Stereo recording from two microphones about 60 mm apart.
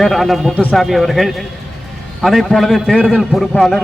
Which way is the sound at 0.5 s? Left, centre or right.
Left.